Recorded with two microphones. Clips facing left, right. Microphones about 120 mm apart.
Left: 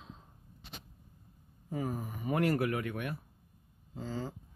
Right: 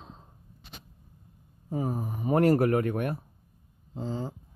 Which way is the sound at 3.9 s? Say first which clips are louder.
Right 5 dB; 25° right (ahead or behind).